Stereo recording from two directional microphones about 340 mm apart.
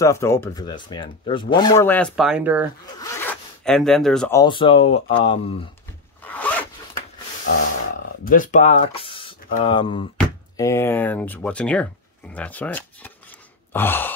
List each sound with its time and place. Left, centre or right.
0.0 s speech: centre
3.0 s speech: centre
6.2 s zipper: centre
8.3 s speech: left; by 14.1 s centre